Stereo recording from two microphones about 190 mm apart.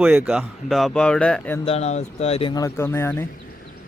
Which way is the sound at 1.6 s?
35° left (ahead or behind).